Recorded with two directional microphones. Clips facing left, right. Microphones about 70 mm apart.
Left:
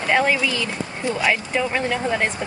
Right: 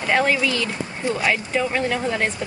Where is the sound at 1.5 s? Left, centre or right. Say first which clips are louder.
Even; centre.